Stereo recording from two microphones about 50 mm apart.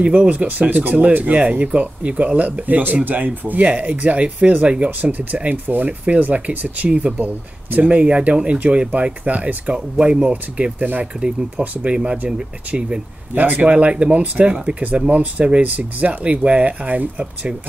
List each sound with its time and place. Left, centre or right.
0.0 s speech: right
5.7 s speech: right
6.9 s speech: centre
7.7 s speech: right
8.0 s speech: right
11.1 s speech: centre
11.6 s speech: right
11.9 s speech: centre
13.3 s speech: right
17.2 s speech: right